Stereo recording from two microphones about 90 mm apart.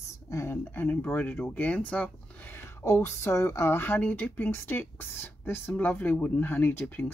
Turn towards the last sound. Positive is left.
turn(degrees=20)  # may be behind; listen again after turning